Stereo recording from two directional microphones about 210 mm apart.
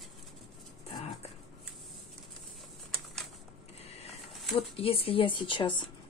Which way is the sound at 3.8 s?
30° left (ahead or behind).